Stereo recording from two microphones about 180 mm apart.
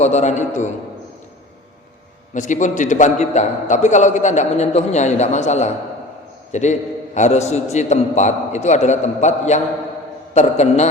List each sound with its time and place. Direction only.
0.0 s a man's voice: 40° left (ahead or behind)
2.3 s a man's voice: 45° left (ahead or behind)